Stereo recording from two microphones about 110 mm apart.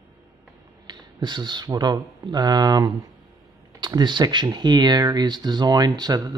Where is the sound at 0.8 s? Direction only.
40° right (ahead or behind).